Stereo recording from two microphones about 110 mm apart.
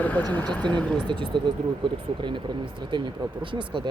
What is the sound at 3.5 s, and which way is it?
Speech, 50° right (ahead or behind).